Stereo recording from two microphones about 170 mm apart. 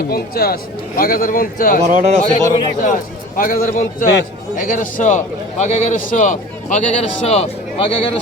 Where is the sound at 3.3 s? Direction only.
55° left (ahead or behind); by 8.1 s 35° left (ahead or behind).